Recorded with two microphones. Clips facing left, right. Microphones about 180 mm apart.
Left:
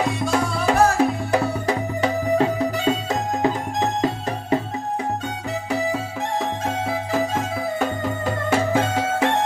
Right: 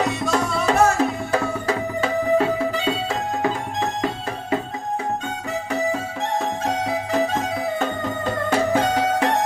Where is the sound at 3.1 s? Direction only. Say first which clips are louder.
Left 2 dB; 20° left (ahead or behind).